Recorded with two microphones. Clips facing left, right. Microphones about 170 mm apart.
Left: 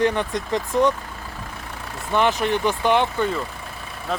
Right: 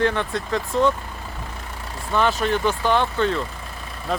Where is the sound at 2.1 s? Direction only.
15° left (ahead or behind).